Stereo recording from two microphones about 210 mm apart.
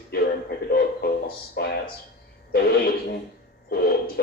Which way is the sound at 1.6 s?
50° left (ahead or behind).